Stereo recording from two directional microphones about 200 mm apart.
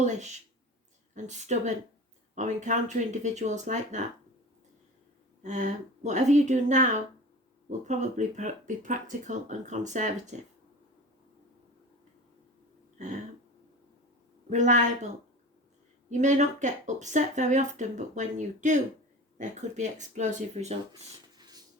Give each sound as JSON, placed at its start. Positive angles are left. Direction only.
{"t": 0.0, "sound": "speech", "side_deg": -35}
{"t": 5.4, "sound": "speech", "side_deg": -35}
{"t": 14.5, "sound": "speech", "side_deg": -40}
{"t": 21.3, "sound": "a sound", "side_deg": -20}